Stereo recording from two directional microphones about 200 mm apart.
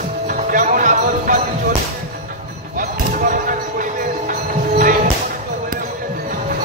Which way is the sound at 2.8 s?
40° right (ahead or behind).